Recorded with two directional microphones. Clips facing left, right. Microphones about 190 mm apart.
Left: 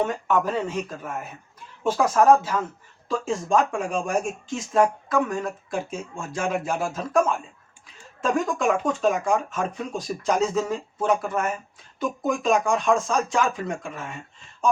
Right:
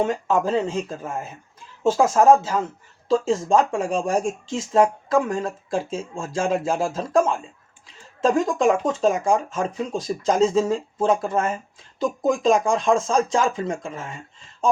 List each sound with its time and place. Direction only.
0.0 s speech: 25° right (ahead or behind)